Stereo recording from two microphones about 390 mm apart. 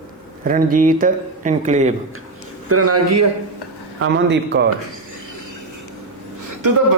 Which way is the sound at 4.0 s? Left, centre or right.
Right.